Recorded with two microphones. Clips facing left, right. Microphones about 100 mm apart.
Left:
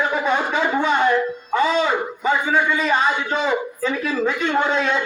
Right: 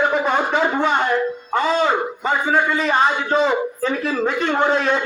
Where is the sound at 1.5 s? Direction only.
45° right (ahead or behind).